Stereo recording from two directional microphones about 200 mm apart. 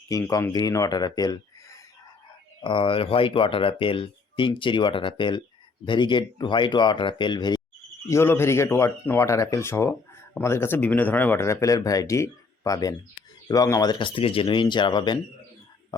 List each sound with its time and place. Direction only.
0.1 s speech: 15° left (ahead or behind)
2.6 s speech: 25° left (ahead or behind)